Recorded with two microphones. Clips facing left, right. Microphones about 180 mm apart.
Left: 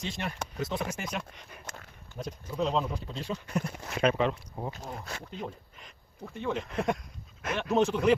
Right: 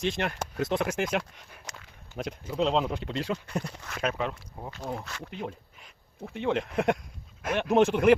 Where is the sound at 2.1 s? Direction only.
90° right.